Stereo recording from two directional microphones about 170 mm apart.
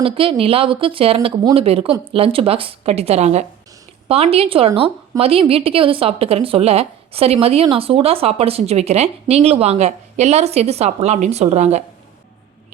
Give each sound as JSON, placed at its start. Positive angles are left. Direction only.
{"t": 0.0, "sound": "a woman's voice", "side_deg": -30}